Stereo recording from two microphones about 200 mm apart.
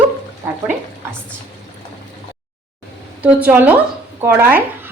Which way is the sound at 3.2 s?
10° right (ahead or behind).